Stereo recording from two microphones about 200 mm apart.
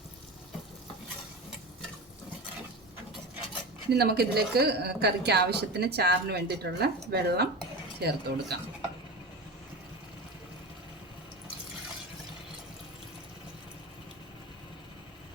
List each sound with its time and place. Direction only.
3.9 s speech: 55° right (ahead or behind)